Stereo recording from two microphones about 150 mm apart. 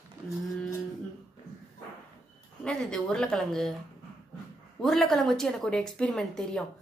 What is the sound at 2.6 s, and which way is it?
Speech, 5° left (ahead or behind).